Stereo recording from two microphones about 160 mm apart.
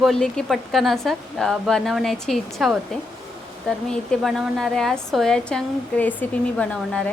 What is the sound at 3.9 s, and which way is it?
Speech, centre (ahead or behind).